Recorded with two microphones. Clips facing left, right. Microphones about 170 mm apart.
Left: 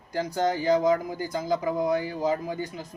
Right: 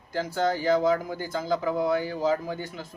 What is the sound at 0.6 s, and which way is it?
Speech, 15° left (ahead or behind).